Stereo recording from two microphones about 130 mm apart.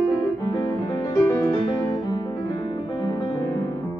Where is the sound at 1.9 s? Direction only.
30° left (ahead or behind).